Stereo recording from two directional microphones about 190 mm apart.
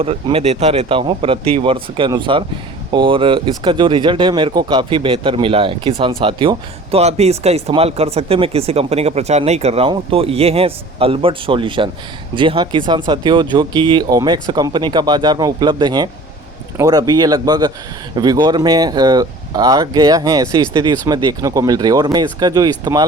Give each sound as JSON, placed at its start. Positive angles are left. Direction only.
{"t": 0.0, "sound": "speech", "side_deg": -30}